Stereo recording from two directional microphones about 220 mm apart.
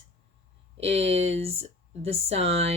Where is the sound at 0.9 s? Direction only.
30° right (ahead or behind).